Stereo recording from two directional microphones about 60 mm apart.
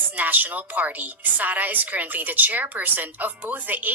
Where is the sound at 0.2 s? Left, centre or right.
Right.